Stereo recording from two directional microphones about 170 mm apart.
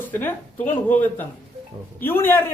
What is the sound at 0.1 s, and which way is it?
A man's voice, 10° left (ahead or behind).